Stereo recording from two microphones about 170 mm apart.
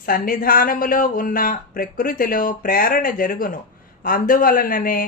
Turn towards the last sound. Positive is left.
turn(degrees=55)  # may be behind; listen again after turning